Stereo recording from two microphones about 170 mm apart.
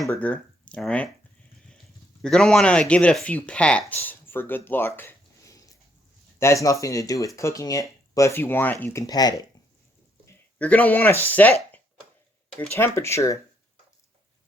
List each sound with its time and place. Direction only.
0.1 s speech: 10° left (ahead or behind)
2.2 s speech: 5° left (ahead or behind); by 9.5 s 20° left (ahead or behind)
10.2 s speech: 10° left (ahead or behind)
12.5 s speech: 15° left (ahead or behind)